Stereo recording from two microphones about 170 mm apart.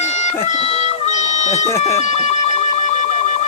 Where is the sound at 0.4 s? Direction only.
40° left (ahead or behind).